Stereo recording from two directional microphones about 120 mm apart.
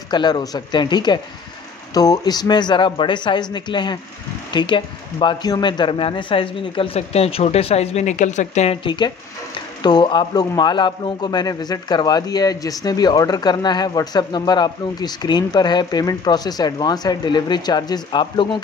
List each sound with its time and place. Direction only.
0.1 s a man's voice: 35° left (ahead or behind); by 8.7 s 75° left (ahead or behind)
8.8 s a man's voice: 40° left (ahead or behind)